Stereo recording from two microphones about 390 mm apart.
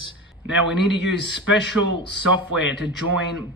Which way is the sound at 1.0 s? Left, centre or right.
Left.